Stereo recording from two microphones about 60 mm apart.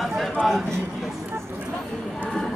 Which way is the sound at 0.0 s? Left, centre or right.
Centre.